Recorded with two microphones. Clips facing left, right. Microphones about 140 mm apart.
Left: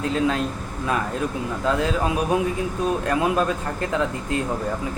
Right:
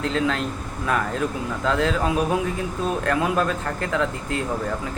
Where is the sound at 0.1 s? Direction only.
15° left (ahead or behind).